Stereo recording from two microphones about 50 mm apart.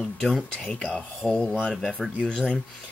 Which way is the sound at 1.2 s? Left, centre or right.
Left.